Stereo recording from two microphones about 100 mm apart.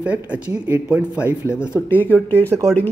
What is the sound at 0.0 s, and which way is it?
Speech, 10° right (ahead or behind).